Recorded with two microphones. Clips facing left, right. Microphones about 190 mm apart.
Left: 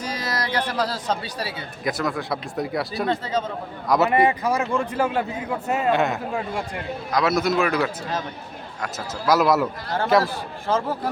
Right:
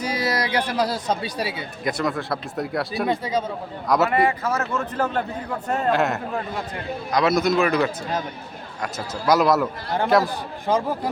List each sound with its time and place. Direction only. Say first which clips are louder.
0.0 s speech: right 4 dB; 10° right (ahead or behind)
1.8 s speech: right 1 dB; centre (ahead or behind)
3.1 s speech: right 1 dB; 10° right (ahead or behind)
3.8 s speech: even; centre (ahead or behind)
4.1 s a man's voice: left 2 dB; 20° left (ahead or behind); by 6.1 s centre (ahead or behind)
6.3 s a man's voice: left 1 dB; 10° left (ahead or behind)
10.7 s speech: right 1 dB; 15° right (ahead or behind)